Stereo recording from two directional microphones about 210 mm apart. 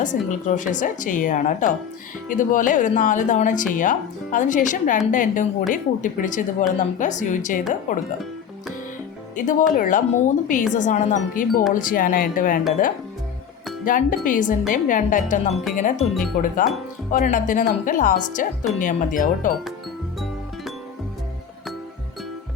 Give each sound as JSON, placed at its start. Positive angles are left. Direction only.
{"t": 0.0, "sound": "a woman's voice", "side_deg": 35}
{"t": 9.3, "sound": "a woman's voice", "side_deg": 40}
{"t": 13.8, "sound": "a woman's voice", "side_deg": 40}